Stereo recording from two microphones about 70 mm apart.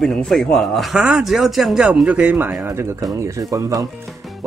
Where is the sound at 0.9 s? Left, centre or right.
Centre.